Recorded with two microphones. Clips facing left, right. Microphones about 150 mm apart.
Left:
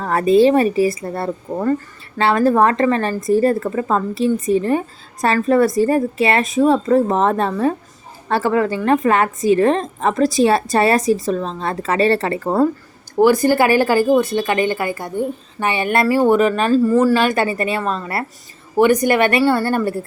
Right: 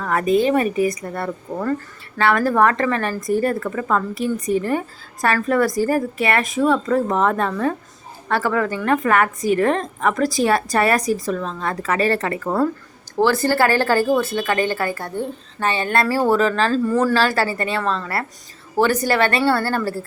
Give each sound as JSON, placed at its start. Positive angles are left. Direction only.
{"t": 0.0, "sound": "a woman's voice", "side_deg": 30}
{"t": 13.1, "sound": "a woman's voice", "side_deg": 15}